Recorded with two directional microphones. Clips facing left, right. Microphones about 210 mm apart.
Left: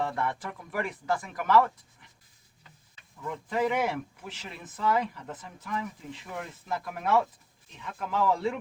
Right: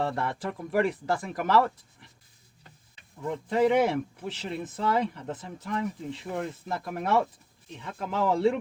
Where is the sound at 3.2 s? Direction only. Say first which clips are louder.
Right 5 dB; 35° right (ahead or behind).